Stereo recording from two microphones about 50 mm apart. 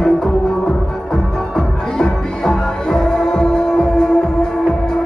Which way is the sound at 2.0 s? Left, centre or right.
Centre.